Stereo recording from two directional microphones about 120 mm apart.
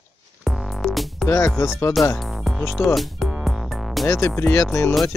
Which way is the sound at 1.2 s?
25° left (ahead or behind).